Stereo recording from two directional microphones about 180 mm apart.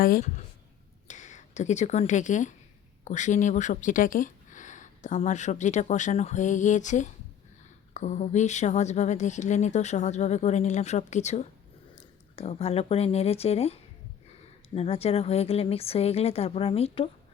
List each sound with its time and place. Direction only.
0.0 s speech: 50° left (ahead or behind)
1.0 s a woman's voice: 40° left (ahead or behind)
14.8 s a woman's voice: 35° left (ahead or behind)